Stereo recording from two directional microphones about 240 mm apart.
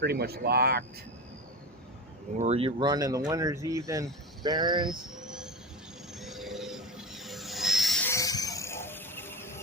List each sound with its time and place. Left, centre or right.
0.0 s speech: right
2.4 s speech: right
4.9 s a sound: centre